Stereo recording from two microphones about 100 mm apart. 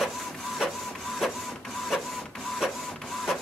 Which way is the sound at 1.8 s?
Centre (ahead or behind).